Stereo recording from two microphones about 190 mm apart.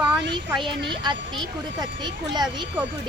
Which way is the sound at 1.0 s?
25° right (ahead or behind).